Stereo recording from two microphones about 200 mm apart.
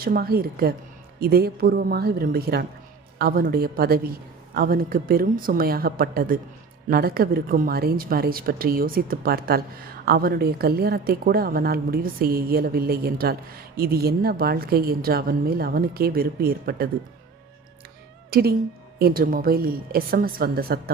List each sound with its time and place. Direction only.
0.0 s speech: 50° right (ahead or behind)
18.3 s speech: 50° right (ahead or behind)